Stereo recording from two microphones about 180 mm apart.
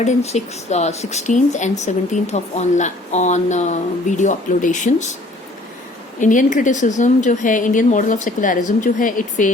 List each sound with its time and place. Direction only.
0.0 s speech: 40° left (ahead or behind)
6.1 s a woman's voice: 45° left (ahead or behind)